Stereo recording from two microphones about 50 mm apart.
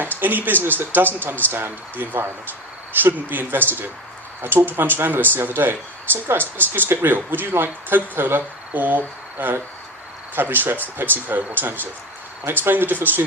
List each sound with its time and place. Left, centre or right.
0.0 s speech: right
6.7 s speech: right